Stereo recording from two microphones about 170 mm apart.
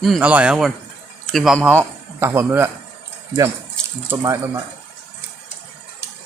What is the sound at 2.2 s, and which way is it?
Speech, 15° right (ahead or behind).